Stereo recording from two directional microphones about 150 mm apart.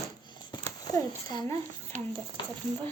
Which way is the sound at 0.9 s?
25° left (ahead or behind).